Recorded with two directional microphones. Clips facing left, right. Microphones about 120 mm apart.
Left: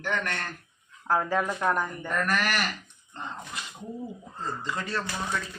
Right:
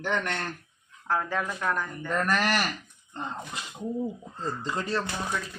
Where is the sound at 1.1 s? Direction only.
10° left (ahead or behind).